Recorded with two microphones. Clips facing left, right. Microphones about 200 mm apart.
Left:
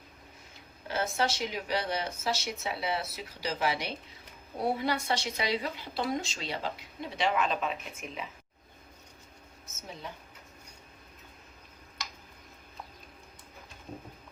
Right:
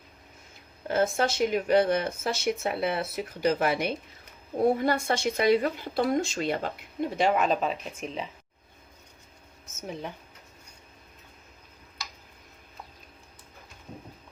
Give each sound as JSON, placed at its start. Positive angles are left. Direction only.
{"t": 0.9, "sound": "a woman's voice", "side_deg": -50}